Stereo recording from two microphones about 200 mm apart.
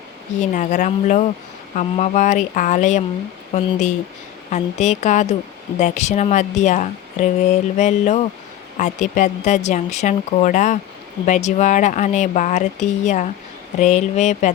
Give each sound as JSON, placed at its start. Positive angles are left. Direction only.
{"t": 0.3, "sound": "speech", "side_deg": 40}